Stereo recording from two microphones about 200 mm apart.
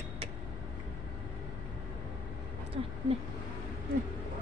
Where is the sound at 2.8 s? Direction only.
30° right (ahead or behind).